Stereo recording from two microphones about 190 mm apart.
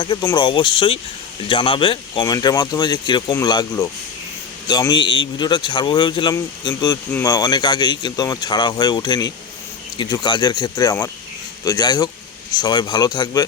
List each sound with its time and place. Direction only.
0.0 s speech: 20° left (ahead or behind)